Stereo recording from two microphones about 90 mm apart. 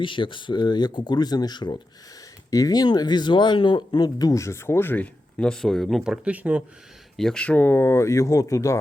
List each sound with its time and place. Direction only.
0.0 s speech: 65° left (ahead or behind)
2.5 s speech: 40° left (ahead or behind); by 5.0 s 25° left (ahead or behind)
5.4 s speech: 10° left (ahead or behind)
6.0 s speech: 10° right (ahead or behind)
7.2 s speech: 5° left (ahead or behind)
7.4 s speech: 20° left (ahead or behind); by 8.8 s 35° left (ahead or behind)